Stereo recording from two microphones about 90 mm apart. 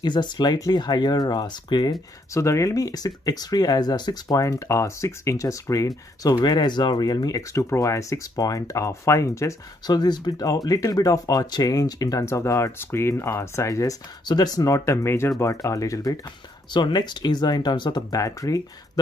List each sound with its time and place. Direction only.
0.0 s speech: 55° left (ahead or behind)
2.3 s speech: 35° left (ahead or behind)
9.8 s speech: 50° left (ahead or behind)
14.2 s speech: 50° left (ahead or behind); by 15.3 s 30° left (ahead or behind)
15.3 s speech: 40° left (ahead or behind)
16.7 s speech: 55° left (ahead or behind)
18.1 s speech: 40° left (ahead or behind)